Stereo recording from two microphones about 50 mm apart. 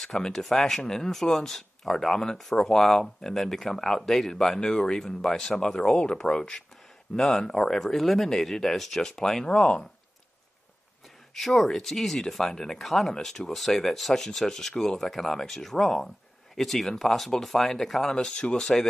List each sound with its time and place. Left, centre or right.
0.0 s speech: centre
11.3 s speech: centre